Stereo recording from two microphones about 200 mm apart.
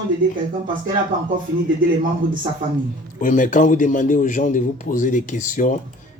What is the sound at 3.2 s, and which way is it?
A man's voice, 40° left (ahead or behind).